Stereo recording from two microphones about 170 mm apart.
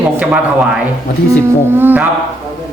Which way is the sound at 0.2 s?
10° right (ahead or behind).